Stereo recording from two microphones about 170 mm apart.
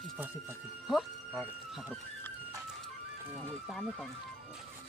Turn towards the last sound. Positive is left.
turn(degrees=0)  # may be behind; listen again after turning